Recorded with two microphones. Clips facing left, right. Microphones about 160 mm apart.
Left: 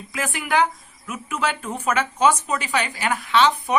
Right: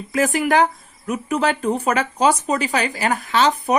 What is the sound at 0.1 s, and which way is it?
Speech, 40° right (ahead or behind).